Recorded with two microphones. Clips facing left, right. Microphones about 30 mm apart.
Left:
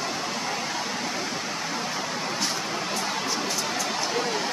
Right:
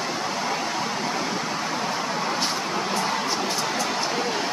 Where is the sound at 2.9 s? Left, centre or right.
Right.